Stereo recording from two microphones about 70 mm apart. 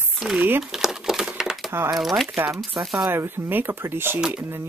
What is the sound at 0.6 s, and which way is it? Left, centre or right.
Speech, centre.